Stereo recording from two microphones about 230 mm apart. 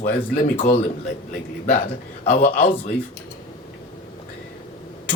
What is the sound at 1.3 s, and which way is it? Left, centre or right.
A man's voice, left.